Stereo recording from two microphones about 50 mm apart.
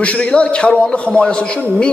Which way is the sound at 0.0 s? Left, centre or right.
Left.